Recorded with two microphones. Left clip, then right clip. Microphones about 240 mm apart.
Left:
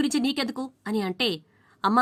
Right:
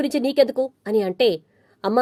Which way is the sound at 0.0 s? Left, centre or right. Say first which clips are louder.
Right 8 dB; centre.